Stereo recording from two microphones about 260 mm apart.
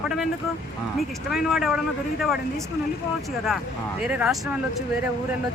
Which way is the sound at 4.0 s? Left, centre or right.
Centre.